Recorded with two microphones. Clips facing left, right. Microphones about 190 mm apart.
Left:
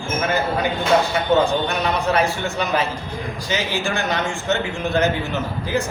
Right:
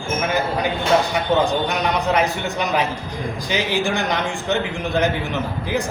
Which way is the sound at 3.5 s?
15° right (ahead or behind).